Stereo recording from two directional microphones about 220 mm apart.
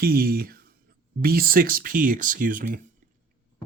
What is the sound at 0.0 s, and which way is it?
Speech, 45° right (ahead or behind).